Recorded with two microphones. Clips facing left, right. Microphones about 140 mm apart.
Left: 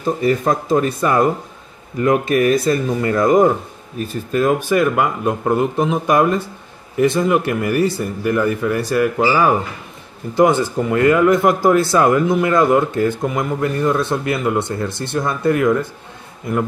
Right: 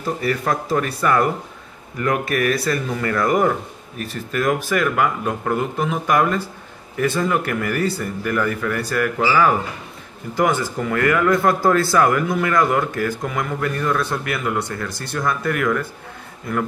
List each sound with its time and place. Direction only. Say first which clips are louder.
0.0 s speech: left 5 dB; 20° left (ahead or behind)